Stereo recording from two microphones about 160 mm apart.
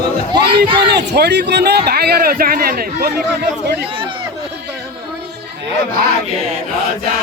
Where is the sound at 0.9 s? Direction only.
90° right.